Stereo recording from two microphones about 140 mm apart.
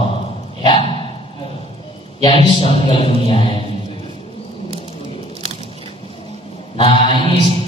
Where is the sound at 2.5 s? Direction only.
40° left (ahead or behind).